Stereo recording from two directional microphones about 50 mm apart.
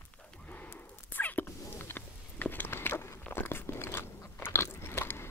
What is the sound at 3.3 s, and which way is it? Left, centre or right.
Biting, left.